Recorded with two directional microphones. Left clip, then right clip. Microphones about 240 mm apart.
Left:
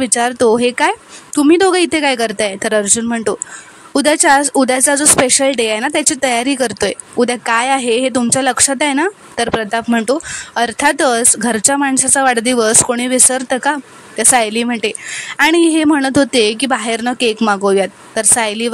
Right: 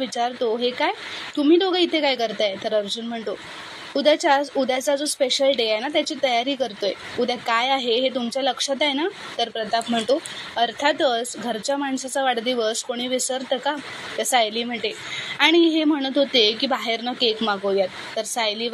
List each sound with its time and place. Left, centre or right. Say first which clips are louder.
0.0 s speech: left 10 dB; left